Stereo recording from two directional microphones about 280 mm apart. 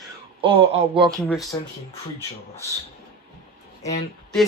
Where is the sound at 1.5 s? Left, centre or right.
Centre.